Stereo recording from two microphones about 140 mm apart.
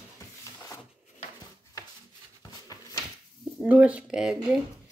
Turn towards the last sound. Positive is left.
turn(degrees=-5)  # may be behind; listen again after turning